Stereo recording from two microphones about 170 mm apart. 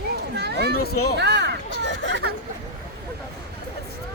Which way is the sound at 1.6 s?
85° left.